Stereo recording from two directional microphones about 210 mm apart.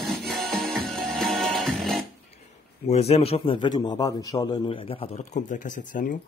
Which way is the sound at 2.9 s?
30° left (ahead or behind).